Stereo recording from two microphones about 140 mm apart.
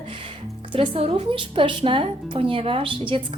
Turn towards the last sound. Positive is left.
turn(degrees=-40)  # may be behind; listen again after turning